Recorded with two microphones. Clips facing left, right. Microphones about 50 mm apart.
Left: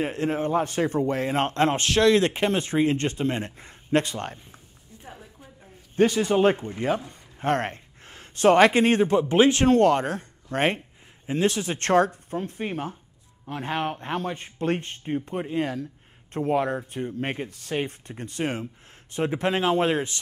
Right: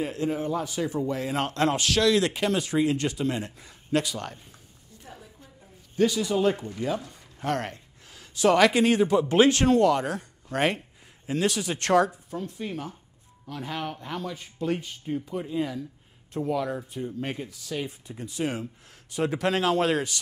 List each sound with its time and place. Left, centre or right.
0.0 s speech: left
5.0 s a sound: centre
5.9 s speech: left
9.3 s speech: left
9.8 s speech: left
19.1 s speech: left